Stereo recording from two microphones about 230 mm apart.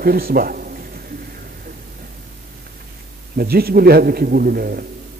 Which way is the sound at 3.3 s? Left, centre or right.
Right.